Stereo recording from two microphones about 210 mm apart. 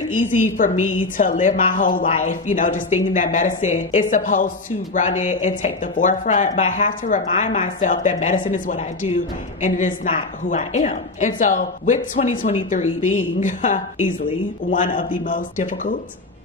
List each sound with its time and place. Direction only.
0.3 s speech: 40° left (ahead or behind)